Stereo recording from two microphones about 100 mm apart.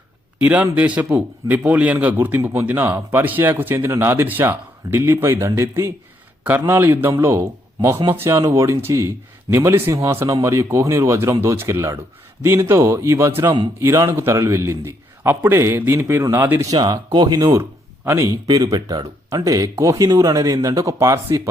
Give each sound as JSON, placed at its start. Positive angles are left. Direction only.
{"t": 0.4, "sound": "a man's voice", "side_deg": -15}
{"t": 16.7, "sound": "speech", "side_deg": -45}
{"t": 18.4, "sound": "speech", "side_deg": -45}